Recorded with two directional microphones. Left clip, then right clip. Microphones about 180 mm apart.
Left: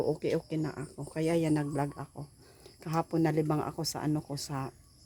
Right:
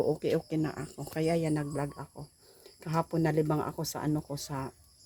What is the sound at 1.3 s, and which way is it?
Speech, 30° left (ahead or behind).